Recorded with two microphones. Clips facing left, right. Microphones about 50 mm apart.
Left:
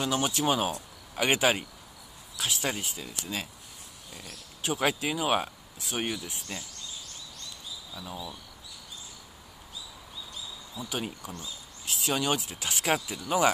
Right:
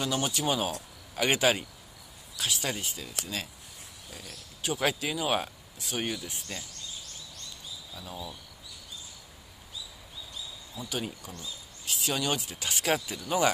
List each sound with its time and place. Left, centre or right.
0.0 s speech: centre
4.1 s speech: centre
4.6 s speech: left
10.8 s speech: centre